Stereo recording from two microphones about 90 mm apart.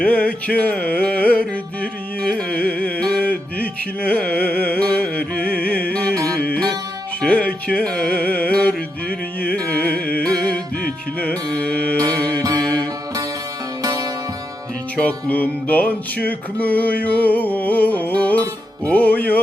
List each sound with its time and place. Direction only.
0.0 s music: 10° left (ahead or behind)
12.4 s music: 45° right (ahead or behind)
12.6 s music: 10° left (ahead or behind)
13.8 s music: 40° right (ahead or behind)
14.9 s music: 15° left (ahead or behind)